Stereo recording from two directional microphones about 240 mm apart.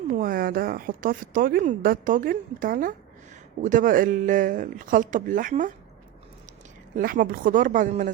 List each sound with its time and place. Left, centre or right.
0.1 s a woman's voice: right
6.9 s a woman's voice: right